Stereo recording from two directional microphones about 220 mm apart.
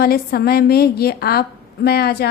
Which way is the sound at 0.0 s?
45° left (ahead or behind).